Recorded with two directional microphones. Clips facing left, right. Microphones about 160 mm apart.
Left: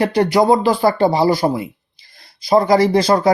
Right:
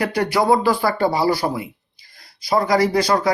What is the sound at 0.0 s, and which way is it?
Speech, 25° left (ahead or behind).